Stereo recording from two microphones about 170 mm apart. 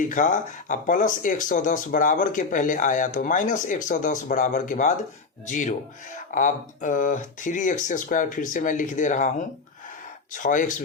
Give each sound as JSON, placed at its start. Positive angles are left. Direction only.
{"t": 0.1, "sound": "speech", "side_deg": 50}
{"t": 10.3, "sound": "speech", "side_deg": 50}